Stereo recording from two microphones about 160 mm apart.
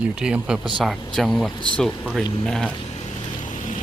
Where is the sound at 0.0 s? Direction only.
5° right (ahead or behind).